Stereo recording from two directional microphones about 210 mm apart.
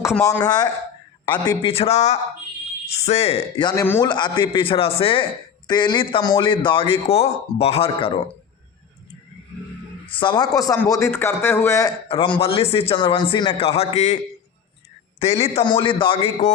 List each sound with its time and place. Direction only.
0.1 s a man's voice: 10° left (ahead or behind)
1.5 s a man's voice: 25° left (ahead or behind)
10.2 s a man's voice: 20° left (ahead or behind)
12.0 s a man's voice: 25° left (ahead or behind)
15.2 s a man's voice: 30° left (ahead or behind)